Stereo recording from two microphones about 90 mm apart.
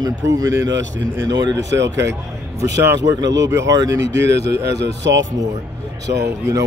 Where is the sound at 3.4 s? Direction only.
40° right (ahead or behind).